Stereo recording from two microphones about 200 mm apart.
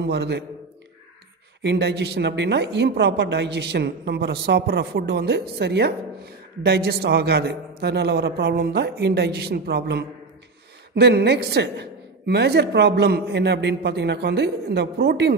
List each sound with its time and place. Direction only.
0.0 s speech: 55° right (ahead or behind)
1.6 s speech: 60° right (ahead or behind)